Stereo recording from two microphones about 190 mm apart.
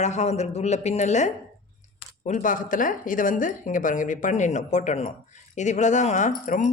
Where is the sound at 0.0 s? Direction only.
35° left (ahead or behind).